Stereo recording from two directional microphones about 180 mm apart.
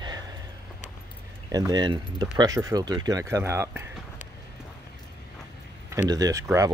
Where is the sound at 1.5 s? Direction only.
20° right (ahead or behind).